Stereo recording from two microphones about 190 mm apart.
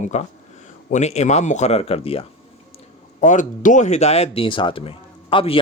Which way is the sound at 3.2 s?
40° left (ahead or behind).